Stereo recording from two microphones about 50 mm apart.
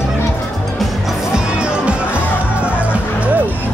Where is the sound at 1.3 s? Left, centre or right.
Centre.